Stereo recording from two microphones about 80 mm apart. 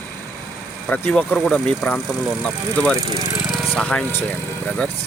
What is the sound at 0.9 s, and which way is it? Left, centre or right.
Speech, left.